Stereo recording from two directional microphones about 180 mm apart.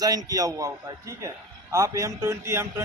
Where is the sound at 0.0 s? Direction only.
20° right (ahead or behind).